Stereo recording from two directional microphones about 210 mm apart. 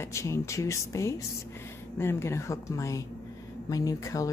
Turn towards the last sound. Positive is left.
turn(degrees=15)  # may be behind; listen again after turning